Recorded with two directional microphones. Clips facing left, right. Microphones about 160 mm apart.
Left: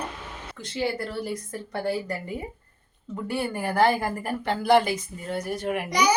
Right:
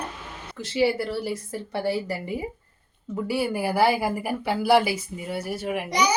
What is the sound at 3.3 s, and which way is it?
A woman's voice, 5° right (ahead or behind).